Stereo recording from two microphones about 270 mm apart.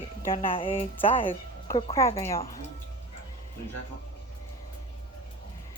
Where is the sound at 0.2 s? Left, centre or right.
Centre.